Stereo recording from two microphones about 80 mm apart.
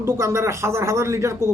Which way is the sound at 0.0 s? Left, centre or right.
Right.